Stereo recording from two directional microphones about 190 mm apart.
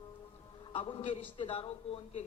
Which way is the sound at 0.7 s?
30° left (ahead or behind).